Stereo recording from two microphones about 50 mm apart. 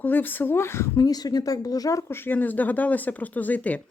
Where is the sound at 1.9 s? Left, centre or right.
Left.